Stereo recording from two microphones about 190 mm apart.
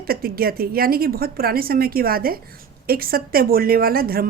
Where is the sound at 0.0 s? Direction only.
55° right (ahead or behind).